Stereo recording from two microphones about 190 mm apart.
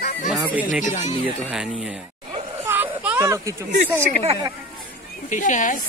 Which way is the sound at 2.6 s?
10° right (ahead or behind).